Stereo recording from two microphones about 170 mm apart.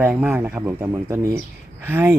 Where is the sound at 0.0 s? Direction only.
10° right (ahead or behind).